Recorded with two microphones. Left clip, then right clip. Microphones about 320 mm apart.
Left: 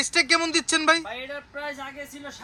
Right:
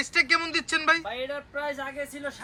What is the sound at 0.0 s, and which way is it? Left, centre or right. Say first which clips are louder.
Speech: left 2 dB; centre.